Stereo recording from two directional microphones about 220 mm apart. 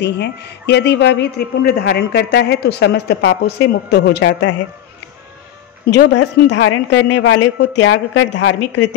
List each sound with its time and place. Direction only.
0.0 s a woman's voice: 50° left (ahead or behind)
5.9 s a woman's voice: 50° left (ahead or behind)